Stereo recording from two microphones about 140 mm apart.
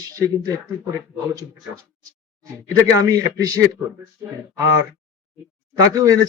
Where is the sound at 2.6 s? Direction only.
25° right (ahead or behind).